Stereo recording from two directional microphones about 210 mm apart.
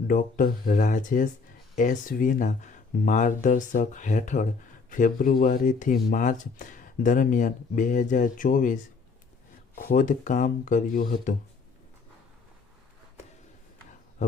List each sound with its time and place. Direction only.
0.1 s speech: 40° left (ahead or behind)